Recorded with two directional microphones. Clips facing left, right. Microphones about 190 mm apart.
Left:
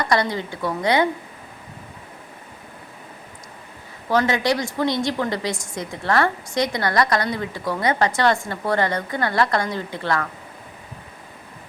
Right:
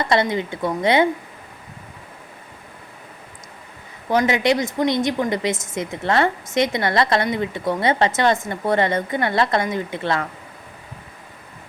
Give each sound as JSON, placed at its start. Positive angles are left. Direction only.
{"t": 0.0, "sound": "a woman's voice", "side_deg": -25}
{"t": 4.1, "sound": "a woman's voice", "side_deg": -20}